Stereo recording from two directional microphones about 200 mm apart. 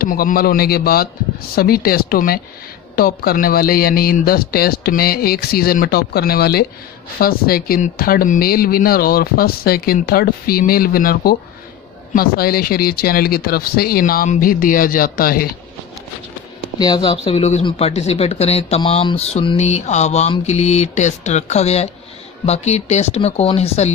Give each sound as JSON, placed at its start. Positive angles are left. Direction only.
{"t": 0.0, "sound": "speech", "side_deg": 45}
{"t": 16.7, "sound": "speech", "side_deg": 20}